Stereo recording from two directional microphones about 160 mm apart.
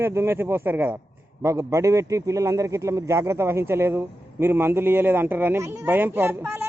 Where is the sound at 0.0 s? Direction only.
15° right (ahead or behind).